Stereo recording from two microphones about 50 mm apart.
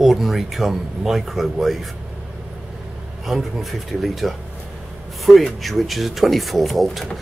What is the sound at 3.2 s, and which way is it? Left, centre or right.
Speech, centre.